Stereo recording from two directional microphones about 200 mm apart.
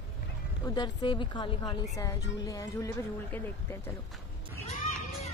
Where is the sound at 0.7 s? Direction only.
25° left (ahead or behind).